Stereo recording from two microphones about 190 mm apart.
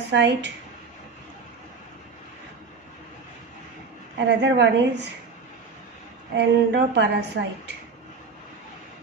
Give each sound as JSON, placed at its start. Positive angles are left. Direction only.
{"t": 0.1, "sound": "a woman's voice", "side_deg": -65}
{"t": 4.4, "sound": "a woman's voice", "side_deg": -65}
{"t": 6.3, "sound": "a woman's voice", "side_deg": -65}